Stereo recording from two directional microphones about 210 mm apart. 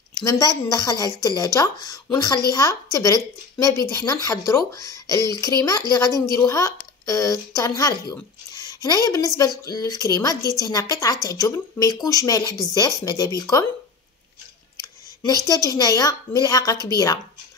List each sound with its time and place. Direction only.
0.2 s speech: 15° left (ahead or behind)
14.8 s a woman's voice: 15° left (ahead or behind)